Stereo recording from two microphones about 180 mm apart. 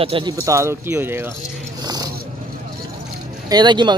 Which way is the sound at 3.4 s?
25° right (ahead or behind).